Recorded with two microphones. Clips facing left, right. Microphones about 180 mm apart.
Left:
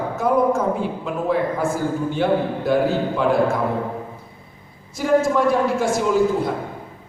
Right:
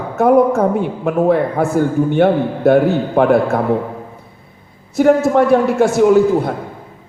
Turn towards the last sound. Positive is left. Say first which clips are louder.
# right 7 dB
turn(degrees=-60)  # may be behind; listen again after turning